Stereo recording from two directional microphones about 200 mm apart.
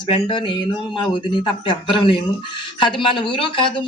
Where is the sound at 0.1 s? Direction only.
25° left (ahead or behind).